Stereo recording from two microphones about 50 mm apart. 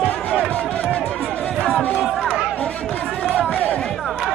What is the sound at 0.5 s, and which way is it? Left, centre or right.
Run, left.